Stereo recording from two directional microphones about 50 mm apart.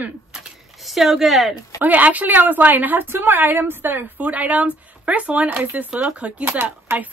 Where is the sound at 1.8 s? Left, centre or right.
Right.